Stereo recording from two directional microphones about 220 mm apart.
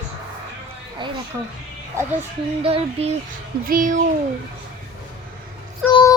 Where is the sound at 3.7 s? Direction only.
35° right (ahead or behind).